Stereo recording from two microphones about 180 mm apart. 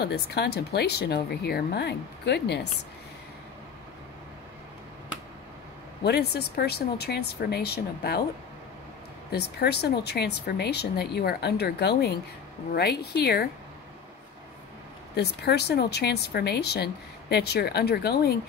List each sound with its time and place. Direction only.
0.0 s speech: 65° left (ahead or behind)
6.0 s speech: 65° left (ahead or behind)
9.3 s speech: 65° left (ahead or behind)
15.1 s speech: 65° left (ahead or behind)